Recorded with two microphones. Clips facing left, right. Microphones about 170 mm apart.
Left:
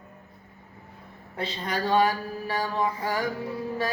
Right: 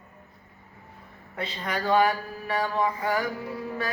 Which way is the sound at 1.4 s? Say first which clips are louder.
Left 1 dB; 35° left (ahead or behind).